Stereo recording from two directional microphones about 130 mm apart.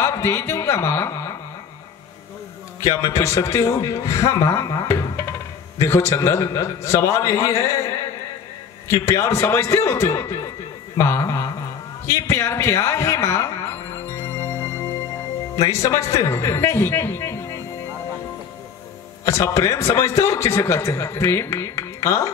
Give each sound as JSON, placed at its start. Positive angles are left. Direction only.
{"t": 0.0, "sound": "a sound", "side_deg": 20}
{"t": 2.8, "sound": "a man's voice", "side_deg": 25}
{"t": 14.0, "sound": "music", "side_deg": 20}
{"t": 15.5, "sound": "a man's voice", "side_deg": 25}
{"t": 19.2, "sound": "a man's voice", "side_deg": 25}